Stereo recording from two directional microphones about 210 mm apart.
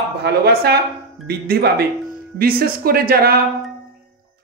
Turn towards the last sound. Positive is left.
turn(degrees=-45)  # may be behind; listen again after turning